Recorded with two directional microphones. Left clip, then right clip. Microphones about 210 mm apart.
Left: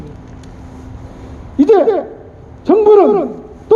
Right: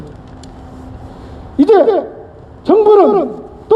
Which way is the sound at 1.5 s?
35° right (ahead or behind).